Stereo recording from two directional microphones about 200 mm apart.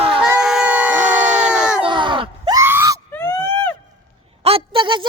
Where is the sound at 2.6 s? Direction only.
10° right (ahead or behind).